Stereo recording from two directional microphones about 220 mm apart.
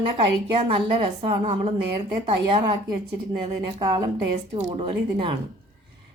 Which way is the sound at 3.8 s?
20° right (ahead or behind).